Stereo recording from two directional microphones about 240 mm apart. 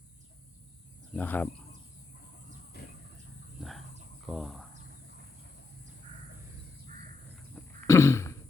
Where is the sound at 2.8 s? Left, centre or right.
Left.